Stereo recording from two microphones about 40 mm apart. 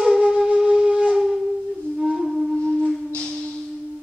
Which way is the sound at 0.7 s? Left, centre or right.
Right.